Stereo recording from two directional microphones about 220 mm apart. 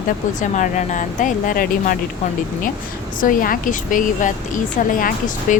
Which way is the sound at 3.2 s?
40° left (ahead or behind).